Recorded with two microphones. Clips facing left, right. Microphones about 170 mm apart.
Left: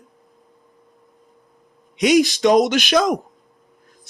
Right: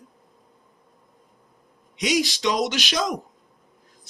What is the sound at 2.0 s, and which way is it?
Speech, 55° left (ahead or behind).